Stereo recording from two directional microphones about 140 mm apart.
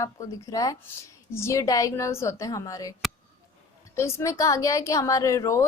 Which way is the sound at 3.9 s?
20° left (ahead or behind).